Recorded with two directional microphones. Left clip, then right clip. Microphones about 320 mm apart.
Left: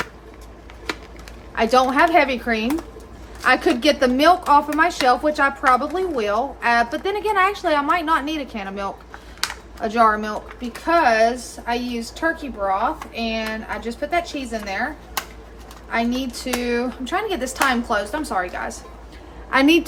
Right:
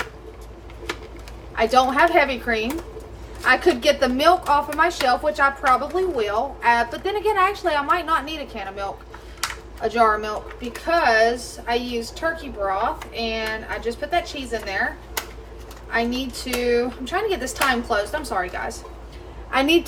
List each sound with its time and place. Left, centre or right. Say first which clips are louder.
1.5 s a woman's voice: left 1 dB; left
15.9 s a child's voice: left 1 dB; centre